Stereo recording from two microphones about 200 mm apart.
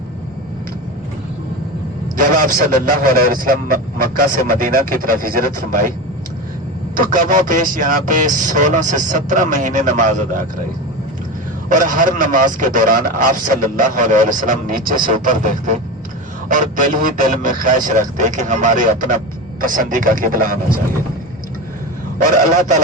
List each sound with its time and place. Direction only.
2.5 s speech: 45° right (ahead or behind)
6.9 s speech: 45° right (ahead or behind)
11.7 s speech: 40° right (ahead or behind)